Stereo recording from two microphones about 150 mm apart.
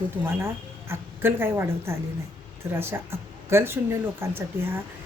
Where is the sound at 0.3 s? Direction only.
15° right (ahead or behind).